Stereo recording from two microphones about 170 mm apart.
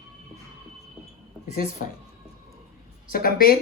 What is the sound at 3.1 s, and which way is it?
Speech, 60° left (ahead or behind).